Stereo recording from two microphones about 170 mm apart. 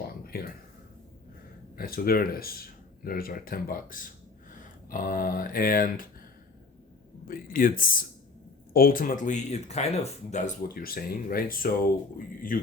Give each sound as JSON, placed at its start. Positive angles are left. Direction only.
{"t": 0.3, "sound": "speech", "side_deg": 65}
{"t": 1.7, "sound": "speech", "side_deg": 60}
{"t": 7.3, "sound": "speech", "side_deg": 55}
{"t": 10.7, "sound": "speech", "side_deg": 60}